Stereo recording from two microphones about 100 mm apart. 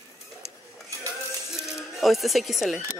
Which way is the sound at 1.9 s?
Centre (ahead or behind).